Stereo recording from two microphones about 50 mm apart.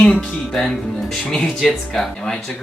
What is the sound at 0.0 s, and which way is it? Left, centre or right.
Music, left.